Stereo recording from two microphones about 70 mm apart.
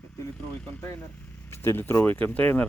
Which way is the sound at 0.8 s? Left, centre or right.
Left.